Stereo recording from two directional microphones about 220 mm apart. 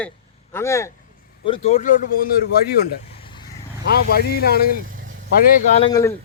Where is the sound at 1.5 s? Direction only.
30° left (ahead or behind).